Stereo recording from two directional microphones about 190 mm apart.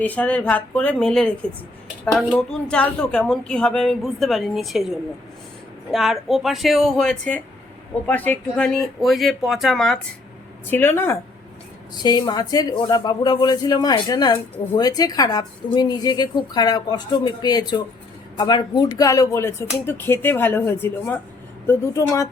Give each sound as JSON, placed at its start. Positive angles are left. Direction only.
{"t": 0.0, "sound": "a woman's voice", "side_deg": 10}